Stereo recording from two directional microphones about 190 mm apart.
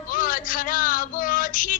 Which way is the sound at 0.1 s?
45° left (ahead or behind).